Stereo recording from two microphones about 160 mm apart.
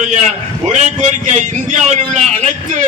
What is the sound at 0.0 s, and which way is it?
A man's voice, 45° right (ahead or behind).